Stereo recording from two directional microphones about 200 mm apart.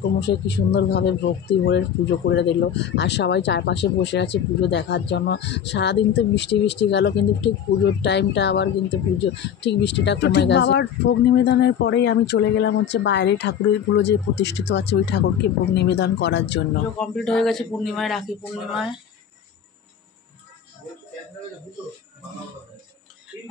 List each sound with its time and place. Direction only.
0.2 s speech: 60° left (ahead or behind)
17.0 s a man's voice: 5° left (ahead or behind)